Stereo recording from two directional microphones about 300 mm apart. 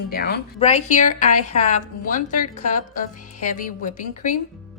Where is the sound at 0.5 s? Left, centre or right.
Left.